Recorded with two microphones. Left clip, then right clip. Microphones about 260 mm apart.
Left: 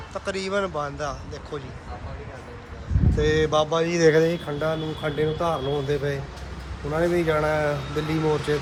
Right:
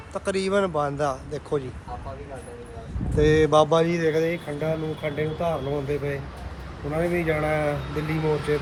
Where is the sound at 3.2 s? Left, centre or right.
Centre.